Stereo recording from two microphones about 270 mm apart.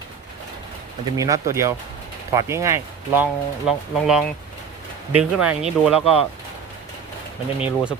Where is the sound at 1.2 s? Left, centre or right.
Centre.